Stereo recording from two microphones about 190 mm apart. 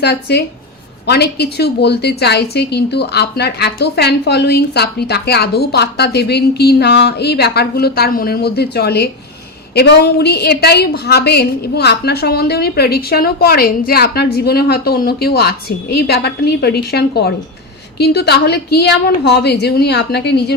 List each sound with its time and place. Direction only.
0.0 s a woman's voice: 60° left (ahead or behind)